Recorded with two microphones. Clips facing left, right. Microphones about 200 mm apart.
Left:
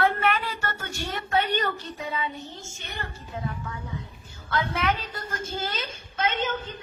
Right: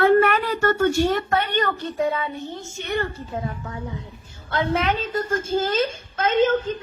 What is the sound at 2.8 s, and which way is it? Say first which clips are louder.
Speech: right 13 dB; 55° right (ahead or behind).